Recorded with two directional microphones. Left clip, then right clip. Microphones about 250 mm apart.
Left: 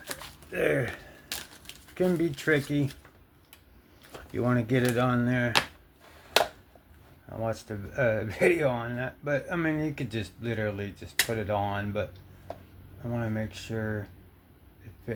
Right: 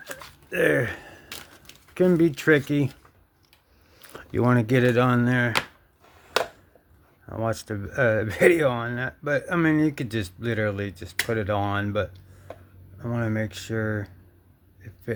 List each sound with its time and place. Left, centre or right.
0.5 s speech: right
2.0 s speech: right
4.3 s speech: right
7.3 s speech: right